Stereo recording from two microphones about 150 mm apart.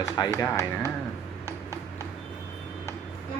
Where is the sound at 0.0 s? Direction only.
20° left (ahead or behind).